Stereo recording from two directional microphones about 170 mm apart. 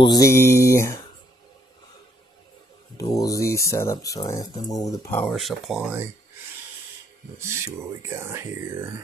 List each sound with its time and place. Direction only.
0.0 s mantra: 20° left (ahead or behind)
3.0 s speech: 20° left (ahead or behind)
5.2 s speech: centre (ahead or behind)
7.3 s speech: 15° right (ahead or behind)